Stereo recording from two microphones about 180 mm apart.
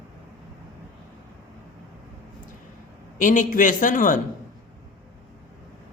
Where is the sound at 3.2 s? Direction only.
45° left (ahead or behind).